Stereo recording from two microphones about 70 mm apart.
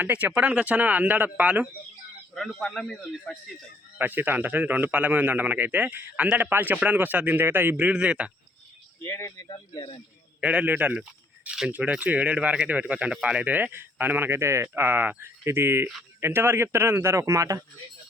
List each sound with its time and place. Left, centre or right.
0.0 s speech: right
2.3 s speech: centre
3.9 s speech: right
9.0 s speech: left
10.4 s speech: centre; by 17.6 s right